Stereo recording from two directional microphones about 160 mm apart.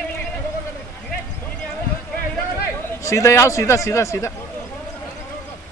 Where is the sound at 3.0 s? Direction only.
20° left (ahead or behind).